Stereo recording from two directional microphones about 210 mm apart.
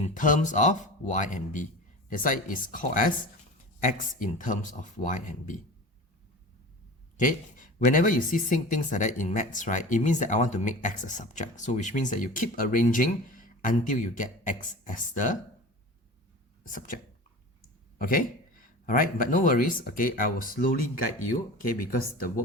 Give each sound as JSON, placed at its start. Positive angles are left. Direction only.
{"t": 0.0, "sound": "speech", "side_deg": 40}
{"t": 7.2, "sound": "speech", "side_deg": 40}
{"t": 16.6, "sound": "speech", "side_deg": 40}
{"t": 17.9, "sound": "a sound", "side_deg": 45}
{"t": 18.9, "sound": "speech", "side_deg": 40}